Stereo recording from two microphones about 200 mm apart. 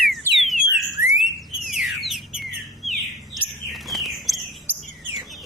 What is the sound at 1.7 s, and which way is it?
Bird, centre (ahead or behind).